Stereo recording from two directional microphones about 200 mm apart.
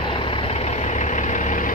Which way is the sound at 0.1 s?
25° left (ahead or behind).